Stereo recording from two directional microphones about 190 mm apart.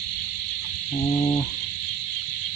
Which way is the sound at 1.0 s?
20° left (ahead or behind).